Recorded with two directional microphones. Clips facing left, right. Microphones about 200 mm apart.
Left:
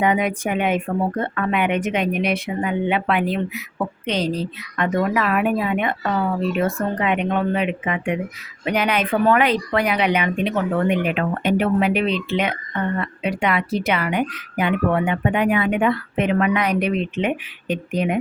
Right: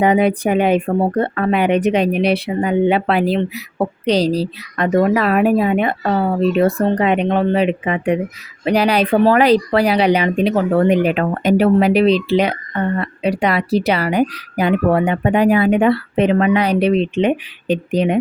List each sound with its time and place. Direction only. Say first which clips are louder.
0.0 s speech: right 6 dB; 35° right (ahead or behind)